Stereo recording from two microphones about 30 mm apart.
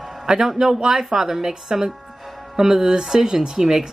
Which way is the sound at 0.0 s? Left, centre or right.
Right.